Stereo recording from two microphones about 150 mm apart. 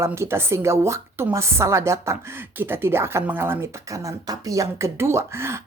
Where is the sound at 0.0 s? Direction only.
20° right (ahead or behind).